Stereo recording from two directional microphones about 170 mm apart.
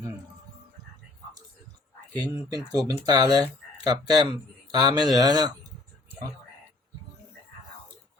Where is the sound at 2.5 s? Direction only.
20° right (ahead or behind).